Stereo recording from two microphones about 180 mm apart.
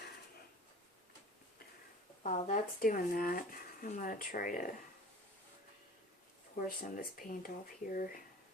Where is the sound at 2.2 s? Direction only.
40° left (ahead or behind).